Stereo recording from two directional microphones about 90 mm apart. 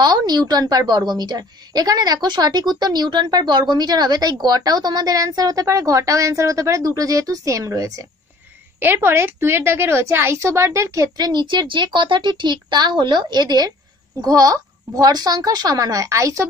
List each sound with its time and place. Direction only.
0.0 s a woman's voice: 50° right (ahead or behind)
8.7 s a woman's voice: 20° right (ahead or behind)
11.1 s a woman's voice: 50° right (ahead or behind)